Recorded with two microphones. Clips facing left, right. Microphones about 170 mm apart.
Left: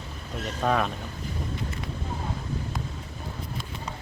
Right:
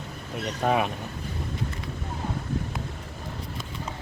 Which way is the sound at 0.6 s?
15° right (ahead or behind).